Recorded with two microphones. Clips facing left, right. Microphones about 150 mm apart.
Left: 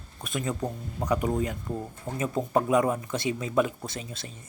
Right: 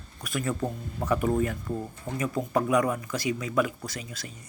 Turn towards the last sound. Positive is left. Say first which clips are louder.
# left 1 dB
turn(degrees=25)  # may be behind; listen again after turning